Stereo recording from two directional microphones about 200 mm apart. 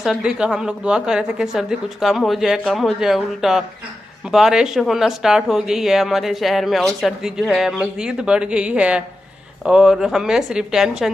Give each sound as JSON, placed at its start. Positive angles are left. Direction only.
{"t": 0.0, "sound": "speech", "side_deg": -5}